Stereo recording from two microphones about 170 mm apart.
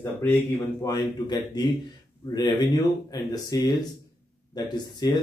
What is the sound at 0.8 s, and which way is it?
A man's voice, 25° left (ahead or behind).